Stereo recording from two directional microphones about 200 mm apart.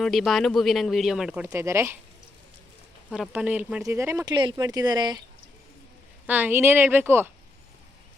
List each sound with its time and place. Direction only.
0.0 s speech: centre (ahead or behind); by 2.0 s 15° right (ahead or behind)
3.3 s speech: 5° right (ahead or behind)
6.2 s speech: 10° right (ahead or behind)